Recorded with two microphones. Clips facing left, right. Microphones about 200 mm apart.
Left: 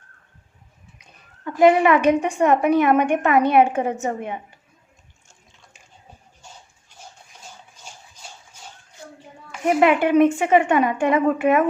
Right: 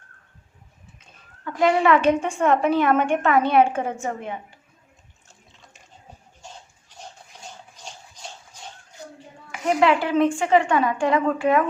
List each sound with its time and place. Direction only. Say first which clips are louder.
1.5 s a woman's voice: left 4 dB; 20° left (ahead or behind)
9.8 s a woman's voice: left 4 dB; 20° left (ahead or behind)